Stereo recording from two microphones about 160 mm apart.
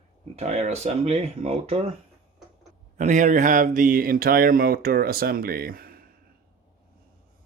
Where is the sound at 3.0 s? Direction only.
50° right (ahead or behind); by 6.0 s 70° right (ahead or behind).